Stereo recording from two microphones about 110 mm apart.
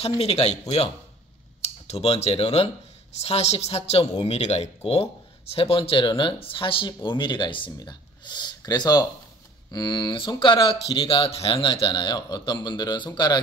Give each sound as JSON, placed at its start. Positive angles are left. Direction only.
{"t": 0.2, "sound": "speech", "side_deg": 70}
{"t": 3.2, "sound": "a woman's voice", "side_deg": 75}